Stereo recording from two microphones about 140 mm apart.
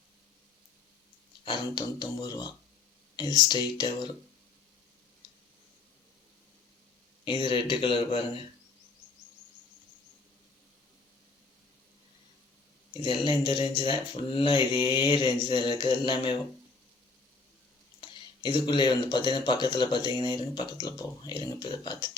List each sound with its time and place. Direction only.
1.5 s speech: 35° left (ahead or behind)
7.3 s speech: 35° left (ahead or behind)
13.0 s speech: 35° left (ahead or behind)
18.0 s speech: 35° left (ahead or behind)